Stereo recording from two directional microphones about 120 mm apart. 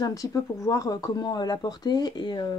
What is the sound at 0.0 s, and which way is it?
Speech, 30° left (ahead or behind).